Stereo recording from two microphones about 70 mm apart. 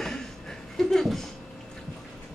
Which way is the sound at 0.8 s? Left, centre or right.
Centre.